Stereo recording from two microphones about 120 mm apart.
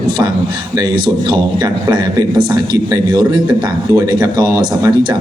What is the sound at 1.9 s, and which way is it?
Speech, 35° right (ahead or behind).